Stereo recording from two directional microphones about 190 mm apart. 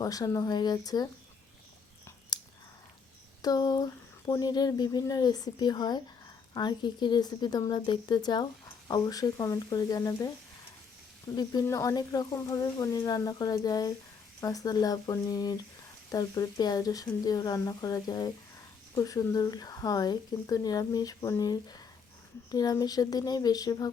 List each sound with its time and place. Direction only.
0.0 s speech: 20° left (ahead or behind)
2.3 s whispering: 20° left (ahead or behind)
3.4 s speech: 20° left (ahead or behind)
11.3 s speech: 20° left (ahead or behind)